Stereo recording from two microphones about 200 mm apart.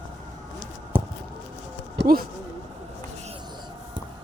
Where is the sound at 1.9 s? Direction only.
50° right (ahead or behind).